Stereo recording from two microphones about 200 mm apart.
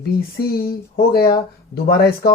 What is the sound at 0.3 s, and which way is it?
Speech, 50° left (ahead or behind).